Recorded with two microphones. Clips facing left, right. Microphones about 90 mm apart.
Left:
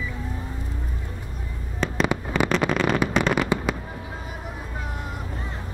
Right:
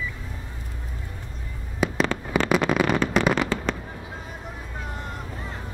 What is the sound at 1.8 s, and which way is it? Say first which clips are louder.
Fireworks: right 2 dB; 5° right (ahead or behind).